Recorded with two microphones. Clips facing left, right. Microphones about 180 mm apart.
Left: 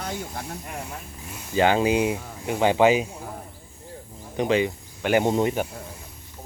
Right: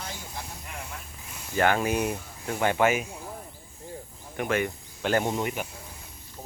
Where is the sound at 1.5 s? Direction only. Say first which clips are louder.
Left 4 dB; 20° left (ahead or behind).